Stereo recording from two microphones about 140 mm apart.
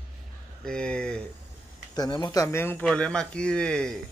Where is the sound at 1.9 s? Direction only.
30° left (ahead or behind); by 4.0 s 5° left (ahead or behind).